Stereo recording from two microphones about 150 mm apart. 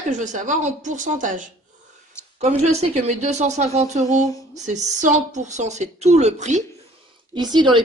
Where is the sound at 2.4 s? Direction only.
45° right (ahead or behind).